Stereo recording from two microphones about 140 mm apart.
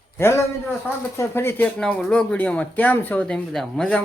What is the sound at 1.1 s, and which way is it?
Speech, 15° left (ahead or behind).